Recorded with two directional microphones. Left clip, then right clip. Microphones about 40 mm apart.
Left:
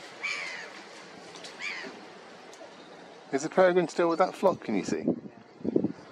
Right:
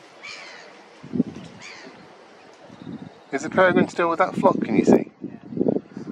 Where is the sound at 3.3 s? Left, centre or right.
Right.